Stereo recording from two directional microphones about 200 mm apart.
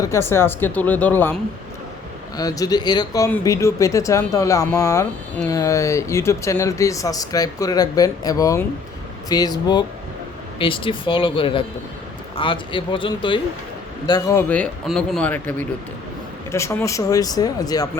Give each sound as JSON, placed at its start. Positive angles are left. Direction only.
{"t": 0.0, "sound": "speech", "side_deg": 15}
{"t": 14.1, "sound": "speech", "side_deg": 15}